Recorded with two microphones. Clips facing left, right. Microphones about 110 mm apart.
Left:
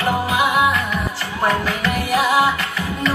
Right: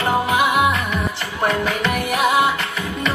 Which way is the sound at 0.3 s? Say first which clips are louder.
Left 1 dB; 25° right (ahead or behind).